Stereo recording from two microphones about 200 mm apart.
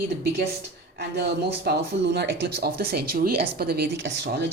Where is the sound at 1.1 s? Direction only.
55° right (ahead or behind).